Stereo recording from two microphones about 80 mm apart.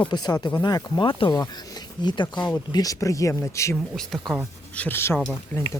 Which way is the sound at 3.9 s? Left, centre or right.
Centre.